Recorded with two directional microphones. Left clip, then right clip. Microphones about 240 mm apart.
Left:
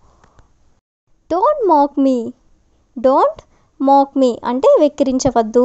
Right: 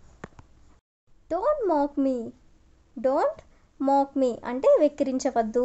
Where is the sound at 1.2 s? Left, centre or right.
Left.